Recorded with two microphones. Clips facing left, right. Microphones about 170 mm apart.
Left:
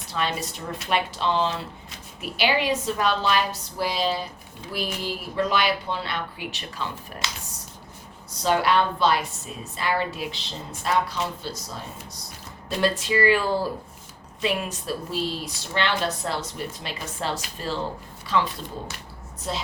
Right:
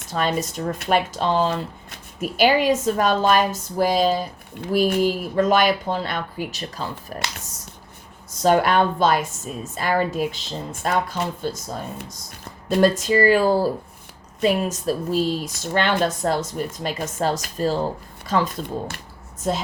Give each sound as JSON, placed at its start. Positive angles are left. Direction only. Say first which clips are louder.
{"t": 0.1, "sound": "speech", "louder": "right 5 dB", "side_deg": -45}
{"t": 8.3, "sound": "a woman's voice", "louder": "right 4 dB", "side_deg": -50}